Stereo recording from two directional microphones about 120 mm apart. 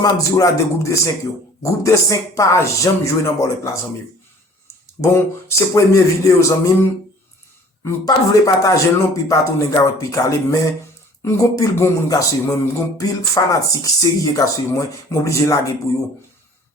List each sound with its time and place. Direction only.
0.0 s speech: 30° left (ahead or behind)
4.9 s speech: 20° left (ahead or behind)
7.9 s speech: 30° left (ahead or behind)